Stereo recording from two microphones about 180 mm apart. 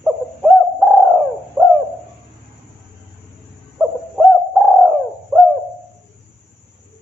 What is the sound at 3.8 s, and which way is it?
Bird, 5° right (ahead or behind).